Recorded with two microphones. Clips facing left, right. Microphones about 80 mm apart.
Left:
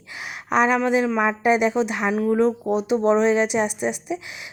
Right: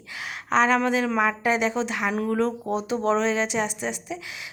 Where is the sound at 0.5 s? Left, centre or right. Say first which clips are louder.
Left 2 dB; centre.